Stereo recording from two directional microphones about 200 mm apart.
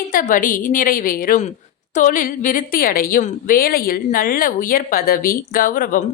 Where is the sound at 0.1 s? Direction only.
45° left (ahead or behind).